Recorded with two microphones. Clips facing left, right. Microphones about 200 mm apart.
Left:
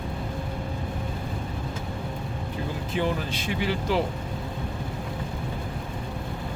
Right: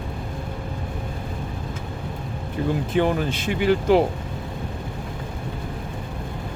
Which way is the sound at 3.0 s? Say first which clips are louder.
Right 5 dB; 55° right (ahead or behind).